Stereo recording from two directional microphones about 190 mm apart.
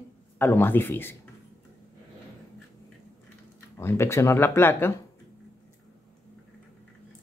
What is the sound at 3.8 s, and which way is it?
Speech, 15° left (ahead or behind).